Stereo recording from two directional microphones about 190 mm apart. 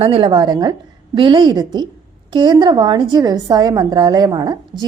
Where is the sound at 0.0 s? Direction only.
25° right (ahead or behind).